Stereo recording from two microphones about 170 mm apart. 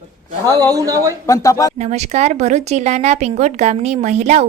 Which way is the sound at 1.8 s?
40° right (ahead or behind).